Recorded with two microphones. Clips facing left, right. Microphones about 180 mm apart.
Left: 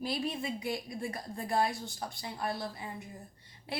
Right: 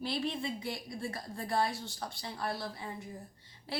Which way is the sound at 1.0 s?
20° left (ahead or behind).